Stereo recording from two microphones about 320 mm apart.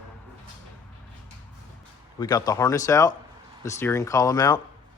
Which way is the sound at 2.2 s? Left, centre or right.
Centre.